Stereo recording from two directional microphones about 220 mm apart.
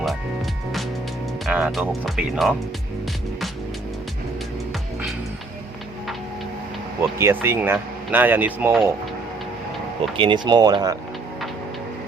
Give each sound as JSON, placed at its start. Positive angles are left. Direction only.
{"t": 1.5, "sound": "speech", "side_deg": -5}
{"t": 7.2, "sound": "speech", "side_deg": -10}
{"t": 10.2, "sound": "speech", "side_deg": -20}